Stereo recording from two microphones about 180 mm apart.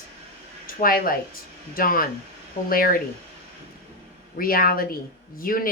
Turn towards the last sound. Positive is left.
turn(degrees=55)  # may be behind; listen again after turning